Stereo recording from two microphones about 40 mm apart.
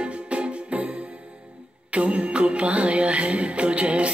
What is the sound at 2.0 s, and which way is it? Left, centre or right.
Music, right.